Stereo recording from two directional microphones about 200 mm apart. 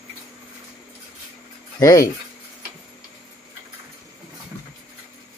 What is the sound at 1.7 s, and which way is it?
Speech, 15° left (ahead or behind).